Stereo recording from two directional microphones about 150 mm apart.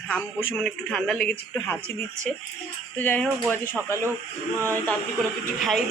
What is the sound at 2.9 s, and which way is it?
Speech, 10° left (ahead or behind).